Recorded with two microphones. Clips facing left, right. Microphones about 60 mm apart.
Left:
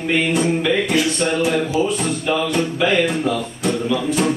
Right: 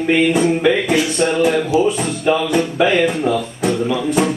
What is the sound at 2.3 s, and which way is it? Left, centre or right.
Music, centre.